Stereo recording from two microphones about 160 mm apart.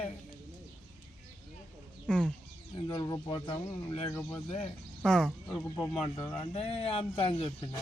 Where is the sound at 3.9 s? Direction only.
40° left (ahead or behind).